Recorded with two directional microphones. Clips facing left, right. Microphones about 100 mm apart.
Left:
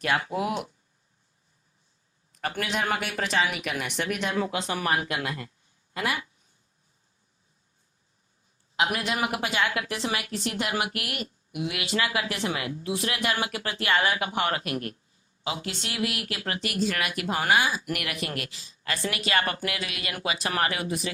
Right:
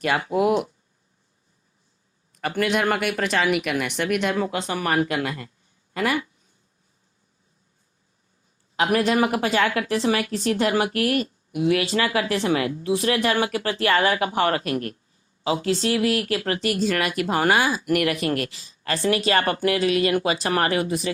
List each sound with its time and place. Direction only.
0.3 s speech: 45° right (ahead or behind)
2.4 s speech: 55° right (ahead or behind)
4.7 s speech: 50° right (ahead or behind)
9.0 s speech: 40° right (ahead or behind)